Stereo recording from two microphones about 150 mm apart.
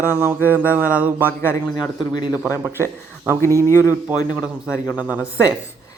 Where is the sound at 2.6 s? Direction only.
15° right (ahead or behind).